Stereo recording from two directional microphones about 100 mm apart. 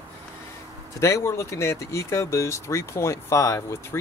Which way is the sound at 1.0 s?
30° left (ahead or behind).